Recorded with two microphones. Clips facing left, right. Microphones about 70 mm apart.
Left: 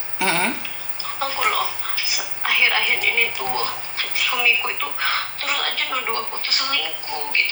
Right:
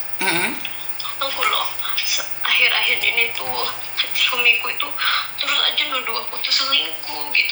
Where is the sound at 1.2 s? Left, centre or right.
Right.